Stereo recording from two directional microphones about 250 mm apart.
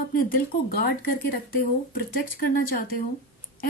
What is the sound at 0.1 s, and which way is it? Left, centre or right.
Speech, left.